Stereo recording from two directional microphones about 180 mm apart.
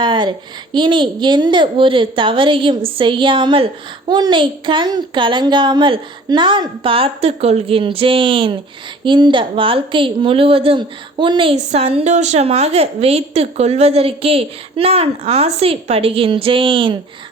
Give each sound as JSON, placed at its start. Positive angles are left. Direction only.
{"t": 0.0, "sound": "a child's voice", "side_deg": -25}